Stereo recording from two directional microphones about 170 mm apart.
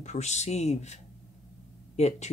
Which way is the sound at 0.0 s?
40° left (ahead or behind).